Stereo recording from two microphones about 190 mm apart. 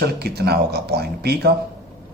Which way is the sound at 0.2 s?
55° right (ahead or behind).